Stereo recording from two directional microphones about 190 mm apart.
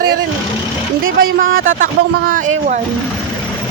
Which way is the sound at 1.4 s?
90° right.